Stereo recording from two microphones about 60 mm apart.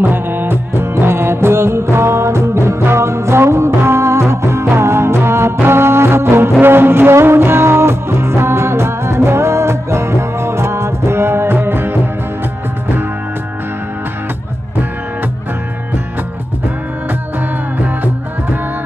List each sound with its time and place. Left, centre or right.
0.0 s music: right
17.8 s music: right